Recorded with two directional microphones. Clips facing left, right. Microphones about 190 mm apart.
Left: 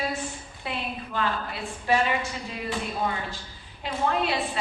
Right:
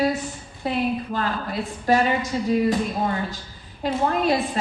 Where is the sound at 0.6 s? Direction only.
40° right (ahead or behind).